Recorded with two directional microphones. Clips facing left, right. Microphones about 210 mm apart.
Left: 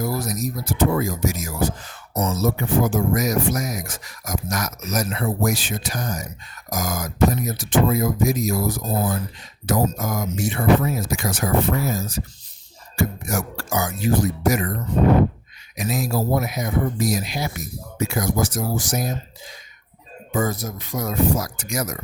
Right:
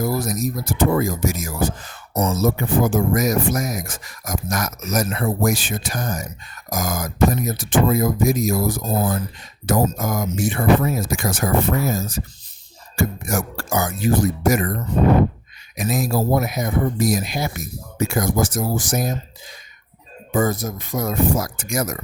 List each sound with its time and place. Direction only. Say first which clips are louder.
0.0 s speech: right 3 dB; 50° right (ahead or behind)
15.8 s speech: right 2 dB; 50° right (ahead or behind)
20.3 s speech: right 3 dB; 50° right (ahead or behind)